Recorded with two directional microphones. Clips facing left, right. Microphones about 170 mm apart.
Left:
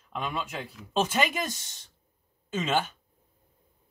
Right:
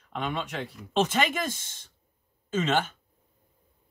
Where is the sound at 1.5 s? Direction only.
50° right (ahead or behind).